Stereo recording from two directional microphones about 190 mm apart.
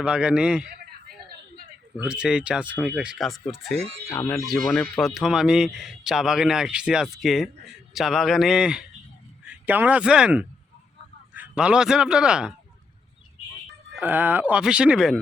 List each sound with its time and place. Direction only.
0.0 s speech: 5° right (ahead or behind)
2.0 s speech: 5° right (ahead or behind)
3.8 s speech: 30° right (ahead or behind)
4.1 s speech: 15° left (ahead or behind)
4.4 s speech: centre (ahead or behind)
14.0 s speech: 10° right (ahead or behind)